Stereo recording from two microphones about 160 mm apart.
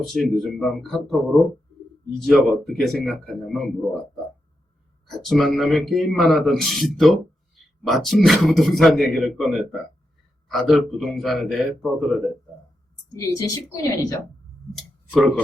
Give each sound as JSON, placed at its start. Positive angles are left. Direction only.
{"t": 0.0, "sound": "a man's voice", "side_deg": 0}
{"t": 13.1, "sound": "a woman's voice", "side_deg": 20}
{"t": 14.8, "sound": "clicking", "side_deg": 0}